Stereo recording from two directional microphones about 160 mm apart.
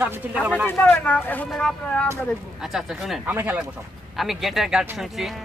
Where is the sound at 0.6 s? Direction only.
15° left (ahead or behind).